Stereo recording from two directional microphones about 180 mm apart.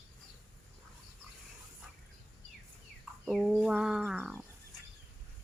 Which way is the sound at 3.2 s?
Centre (ahead or behind).